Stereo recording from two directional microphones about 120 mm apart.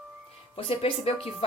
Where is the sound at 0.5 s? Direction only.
55° left (ahead or behind).